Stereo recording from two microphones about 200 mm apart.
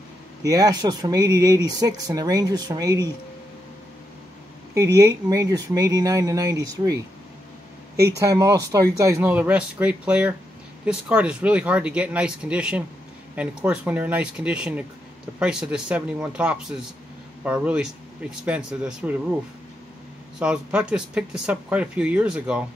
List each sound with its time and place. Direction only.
0.4 s speech: 15° right (ahead or behind)
4.7 s speech: 15° right (ahead or behind)
8.2 s speech: 15° right (ahead or behind)
20.3 s speech: 5° right (ahead or behind)